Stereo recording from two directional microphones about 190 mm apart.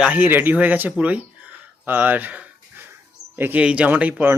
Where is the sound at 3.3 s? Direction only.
10° right (ahead or behind).